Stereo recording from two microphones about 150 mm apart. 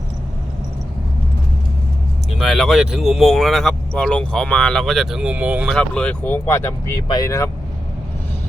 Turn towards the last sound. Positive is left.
turn(degrees=20)  # may be behind; listen again after turning